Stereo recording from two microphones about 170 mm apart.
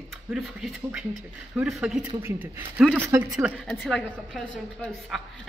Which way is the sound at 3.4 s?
Centre (ahead or behind).